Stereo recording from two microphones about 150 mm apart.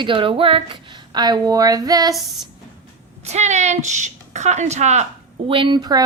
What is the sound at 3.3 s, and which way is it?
A woman's voice, 50° right (ahead or behind).